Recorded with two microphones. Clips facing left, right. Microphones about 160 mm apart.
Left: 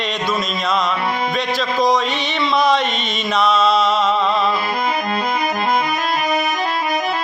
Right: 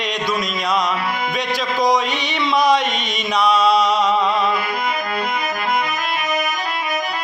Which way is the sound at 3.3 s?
15° right (ahead or behind).